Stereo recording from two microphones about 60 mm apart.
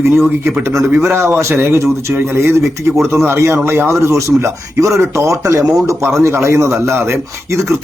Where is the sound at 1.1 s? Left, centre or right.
Right.